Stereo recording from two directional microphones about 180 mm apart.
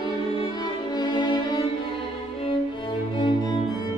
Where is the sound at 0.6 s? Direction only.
25° left (ahead or behind).